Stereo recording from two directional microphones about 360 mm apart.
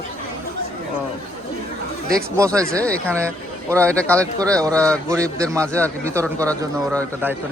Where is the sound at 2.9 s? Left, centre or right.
Centre.